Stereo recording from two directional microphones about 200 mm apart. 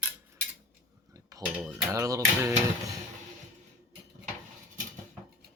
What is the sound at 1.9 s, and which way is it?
Speech, 15° right (ahead or behind).